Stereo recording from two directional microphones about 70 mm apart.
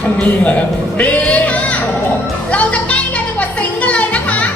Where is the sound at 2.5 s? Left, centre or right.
Centre.